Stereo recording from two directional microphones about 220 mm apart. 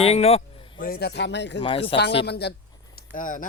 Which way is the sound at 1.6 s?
25° left (ahead or behind).